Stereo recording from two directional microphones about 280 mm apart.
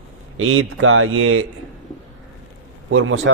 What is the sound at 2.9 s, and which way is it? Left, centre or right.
Speech, right.